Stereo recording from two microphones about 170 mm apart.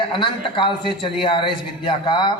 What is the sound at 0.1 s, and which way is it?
A man's voice, 30° left (ahead or behind).